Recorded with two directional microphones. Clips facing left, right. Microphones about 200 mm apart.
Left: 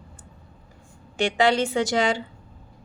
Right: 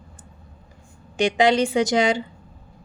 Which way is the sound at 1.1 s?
15° right (ahead or behind).